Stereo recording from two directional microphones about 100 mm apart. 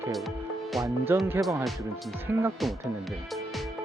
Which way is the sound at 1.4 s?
20° right (ahead or behind).